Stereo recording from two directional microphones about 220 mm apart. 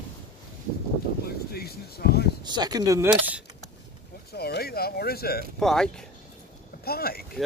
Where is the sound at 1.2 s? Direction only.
45° left (ahead or behind).